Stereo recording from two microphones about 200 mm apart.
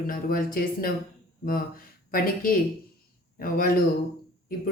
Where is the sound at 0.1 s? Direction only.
45° left (ahead or behind).